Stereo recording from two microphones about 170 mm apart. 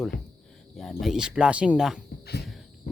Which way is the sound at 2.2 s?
70° left (ahead or behind).